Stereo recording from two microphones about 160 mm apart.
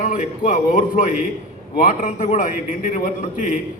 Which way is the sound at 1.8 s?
55° left (ahead or behind).